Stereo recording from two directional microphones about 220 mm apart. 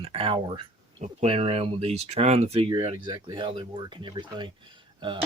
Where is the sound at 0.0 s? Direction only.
25° right (ahead or behind).